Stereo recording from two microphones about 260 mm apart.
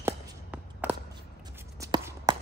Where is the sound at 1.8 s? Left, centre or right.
Centre.